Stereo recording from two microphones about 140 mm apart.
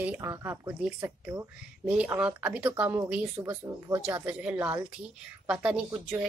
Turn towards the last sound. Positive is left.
turn(degrees=-10)  # may be behind; listen again after turning